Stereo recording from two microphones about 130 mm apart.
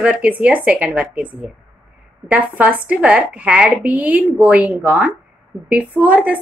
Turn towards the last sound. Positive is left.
turn(degrees=-10)  # may be behind; listen again after turning